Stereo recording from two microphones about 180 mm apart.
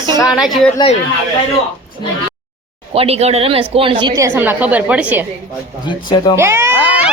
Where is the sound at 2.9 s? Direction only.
35° right (ahead or behind); by 5.2 s 10° right (ahead or behind).